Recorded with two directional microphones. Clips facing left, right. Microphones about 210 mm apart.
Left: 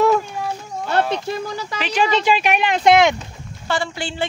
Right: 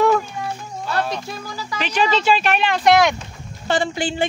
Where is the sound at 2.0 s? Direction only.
15° left (ahead or behind).